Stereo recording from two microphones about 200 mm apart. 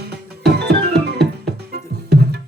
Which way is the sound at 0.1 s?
55° right (ahead or behind).